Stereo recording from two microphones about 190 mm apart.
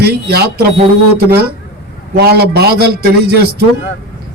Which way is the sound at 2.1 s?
60° right (ahead or behind).